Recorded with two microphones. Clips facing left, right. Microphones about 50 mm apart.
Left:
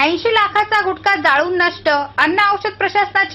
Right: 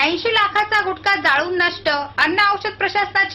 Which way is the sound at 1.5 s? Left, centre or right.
Left.